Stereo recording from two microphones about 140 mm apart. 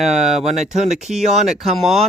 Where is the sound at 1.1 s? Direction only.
5° right (ahead or behind).